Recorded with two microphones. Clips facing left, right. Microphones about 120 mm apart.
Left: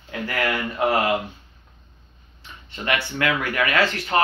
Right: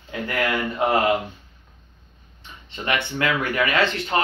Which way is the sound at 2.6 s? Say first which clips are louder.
Even; 25° right (ahead or behind).